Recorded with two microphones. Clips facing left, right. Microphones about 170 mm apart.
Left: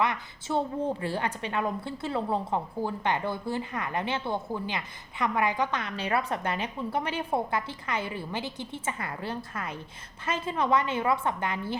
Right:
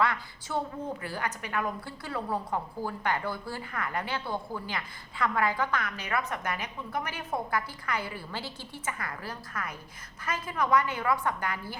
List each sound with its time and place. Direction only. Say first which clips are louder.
0.0 s a woman's voice: even; 20° left (ahead or behind)